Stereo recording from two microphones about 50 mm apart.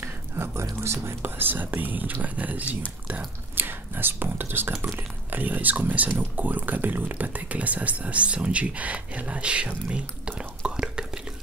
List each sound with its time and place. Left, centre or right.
0.0 s speech: right
1.3 s speech: right
3.5 s speech: right
10.6 s whispering: centre